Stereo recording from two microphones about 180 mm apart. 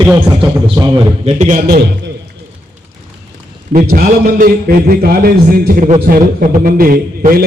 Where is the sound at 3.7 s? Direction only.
55° right (ahead or behind).